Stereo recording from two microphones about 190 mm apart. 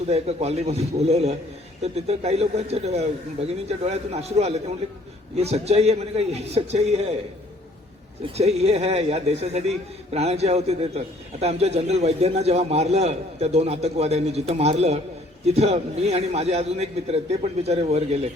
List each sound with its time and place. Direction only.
0.1 s a man's voice: 35° right (ahead or behind)
8.4 s a man's voice: 35° right (ahead or behind)